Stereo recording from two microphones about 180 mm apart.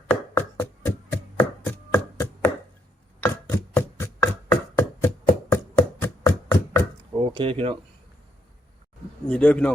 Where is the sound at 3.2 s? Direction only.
10° left (ahead or behind).